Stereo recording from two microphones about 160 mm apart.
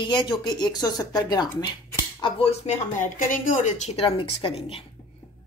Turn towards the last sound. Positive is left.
turn(degrees=40)  # may be behind; listen again after turning